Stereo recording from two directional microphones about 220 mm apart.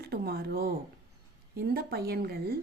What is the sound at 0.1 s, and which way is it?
A woman's voice, 45° right (ahead or behind).